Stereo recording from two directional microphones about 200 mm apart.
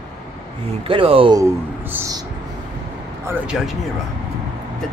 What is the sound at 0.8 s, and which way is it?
Speech, 25° right (ahead or behind).